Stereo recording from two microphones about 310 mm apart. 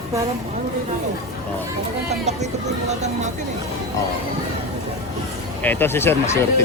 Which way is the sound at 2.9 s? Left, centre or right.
Right.